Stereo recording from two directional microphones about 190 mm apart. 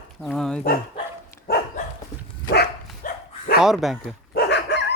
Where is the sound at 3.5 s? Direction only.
Centre (ahead or behind).